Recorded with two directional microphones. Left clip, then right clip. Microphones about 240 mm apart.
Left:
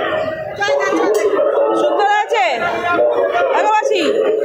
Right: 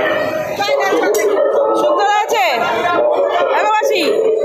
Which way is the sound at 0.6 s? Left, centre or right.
Left.